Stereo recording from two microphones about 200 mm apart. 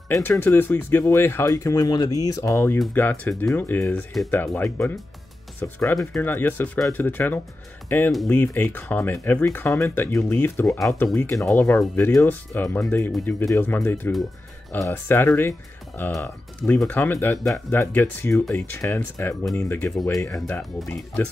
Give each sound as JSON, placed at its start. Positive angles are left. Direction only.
{"t": 0.1, "sound": "speech", "side_deg": 10}